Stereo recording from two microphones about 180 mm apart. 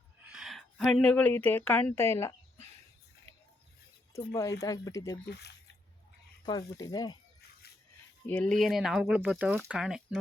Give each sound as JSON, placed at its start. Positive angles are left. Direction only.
{"t": 0.3, "sound": "speech", "side_deg": -5}
{"t": 4.1, "sound": "speech", "side_deg": 15}
{"t": 5.3, "sound": "speech", "side_deg": 65}
{"t": 6.4, "sound": "speech", "side_deg": 25}
{"t": 8.3, "sound": "speech", "side_deg": 5}